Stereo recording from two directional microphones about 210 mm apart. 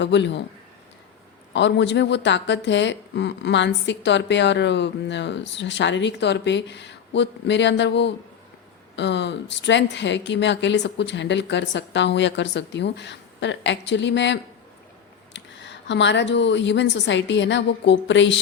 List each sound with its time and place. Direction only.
0.0 s a woman's voice: 55° left (ahead or behind)
1.5 s a woman's voice: 55° left (ahead or behind)